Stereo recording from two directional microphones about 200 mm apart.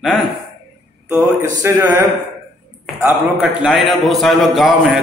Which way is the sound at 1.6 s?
15° right (ahead or behind).